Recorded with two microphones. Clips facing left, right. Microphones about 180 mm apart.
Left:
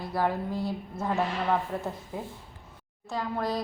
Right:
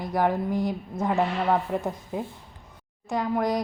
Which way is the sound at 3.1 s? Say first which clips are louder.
Right 5 dB; 20° right (ahead or behind).